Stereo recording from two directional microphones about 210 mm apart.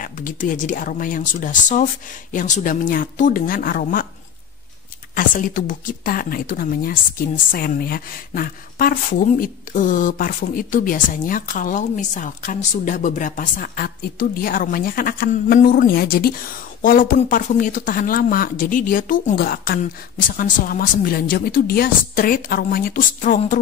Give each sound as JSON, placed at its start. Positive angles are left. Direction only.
{"t": 0.0, "sound": "speech", "side_deg": 40}
{"t": 5.1, "sound": "speech", "side_deg": 40}